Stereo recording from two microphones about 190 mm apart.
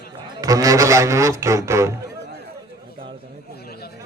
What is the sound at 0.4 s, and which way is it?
A man's voice, 20° right (ahead or behind).